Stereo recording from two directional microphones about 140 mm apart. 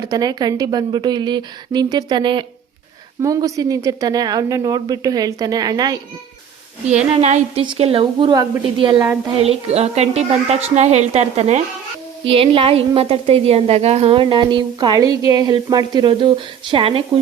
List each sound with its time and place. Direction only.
0.0 s speech: 30° right (ahead or behind)
6.8 s a woman's voice: 55° right (ahead or behind)
7.6 s a woman's voice: 40° right (ahead or behind)
9.4 s a woman's voice: 50° right (ahead or behind)
12.2 s a woman's voice: 40° right (ahead or behind)